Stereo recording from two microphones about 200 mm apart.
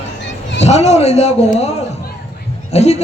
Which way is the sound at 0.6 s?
35° left (ahead or behind).